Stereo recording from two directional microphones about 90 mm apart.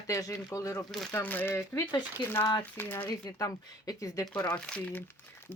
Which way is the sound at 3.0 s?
45° left (ahead or behind).